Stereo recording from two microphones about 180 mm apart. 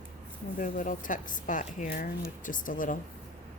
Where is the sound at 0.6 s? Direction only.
45° left (ahead or behind).